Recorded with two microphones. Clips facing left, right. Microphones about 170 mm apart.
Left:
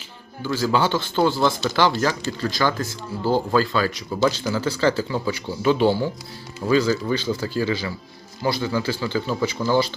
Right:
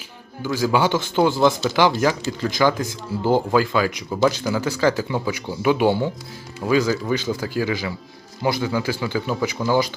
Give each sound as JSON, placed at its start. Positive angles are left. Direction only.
{"t": 0.4, "sound": "speech", "side_deg": -10}